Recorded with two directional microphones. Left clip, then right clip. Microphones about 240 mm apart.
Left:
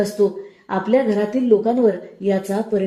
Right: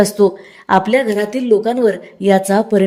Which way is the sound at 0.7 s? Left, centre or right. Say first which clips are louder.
Right 5 dB; right.